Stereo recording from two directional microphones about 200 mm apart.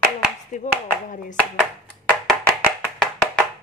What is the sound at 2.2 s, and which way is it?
Music, 5° right (ahead or behind).